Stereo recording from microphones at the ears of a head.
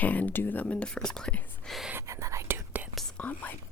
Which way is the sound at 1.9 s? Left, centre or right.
Right.